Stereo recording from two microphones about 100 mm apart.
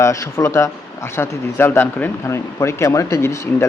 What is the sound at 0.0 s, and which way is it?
Speech, 30° left (ahead or behind).